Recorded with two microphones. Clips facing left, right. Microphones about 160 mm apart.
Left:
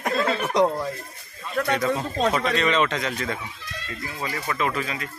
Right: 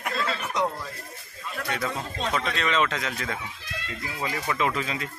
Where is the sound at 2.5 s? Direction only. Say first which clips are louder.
Left 4 dB; centre (ahead or behind).